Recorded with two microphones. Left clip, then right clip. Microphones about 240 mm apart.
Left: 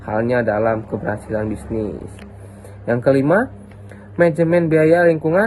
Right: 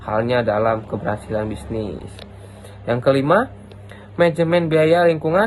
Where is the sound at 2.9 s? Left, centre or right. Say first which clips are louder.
Left 1 dB; right.